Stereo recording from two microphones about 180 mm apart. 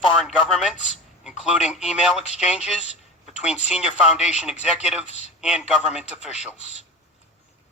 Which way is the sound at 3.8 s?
5° right (ahead or behind).